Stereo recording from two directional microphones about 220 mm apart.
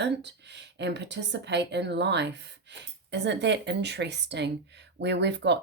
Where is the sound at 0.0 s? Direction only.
50° right (ahead or behind).